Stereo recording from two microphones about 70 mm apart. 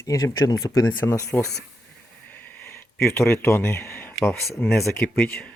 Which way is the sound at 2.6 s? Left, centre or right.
Left.